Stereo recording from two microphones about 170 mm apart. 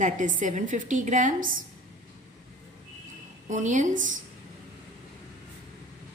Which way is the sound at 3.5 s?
45° right (ahead or behind).